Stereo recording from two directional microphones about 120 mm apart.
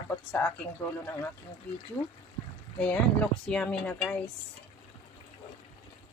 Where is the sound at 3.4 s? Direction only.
10° left (ahead or behind).